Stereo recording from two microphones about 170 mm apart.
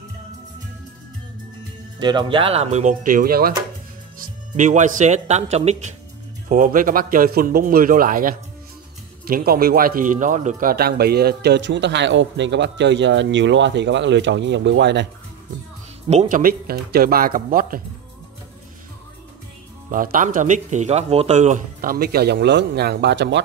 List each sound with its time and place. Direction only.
2.0 s speech: 25° right (ahead or behind); by 3.5 s 60° right (ahead or behind)
4.2 s speech: 45° right (ahead or behind)
6.5 s a man's voice: 50° right (ahead or behind); by 15.0 s 90° right
16.1 s speech: 45° right (ahead or behind)
19.9 s speech: 55° right (ahead or behind); by 23.4 s 90° right